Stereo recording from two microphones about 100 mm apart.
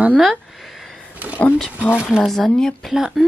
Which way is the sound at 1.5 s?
10° left (ahead or behind).